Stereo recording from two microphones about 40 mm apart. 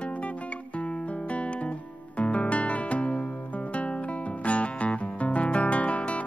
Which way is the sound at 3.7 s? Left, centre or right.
Left.